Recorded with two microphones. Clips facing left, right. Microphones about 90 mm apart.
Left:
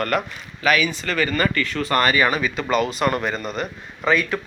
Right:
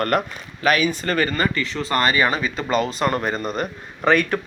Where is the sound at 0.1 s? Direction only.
45° right (ahead or behind); by 3.2 s 25° right (ahead or behind).